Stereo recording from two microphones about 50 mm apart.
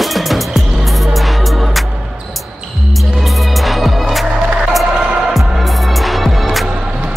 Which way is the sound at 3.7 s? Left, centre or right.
Centre.